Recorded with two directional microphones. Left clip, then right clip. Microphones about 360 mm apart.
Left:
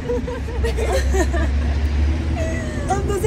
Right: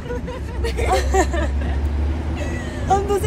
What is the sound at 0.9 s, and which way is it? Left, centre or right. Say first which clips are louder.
Speech: right 6 dB; centre.